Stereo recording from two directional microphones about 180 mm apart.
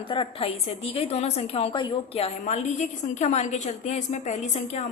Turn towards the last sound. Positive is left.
turn(degrees=40)  # may be behind; listen again after turning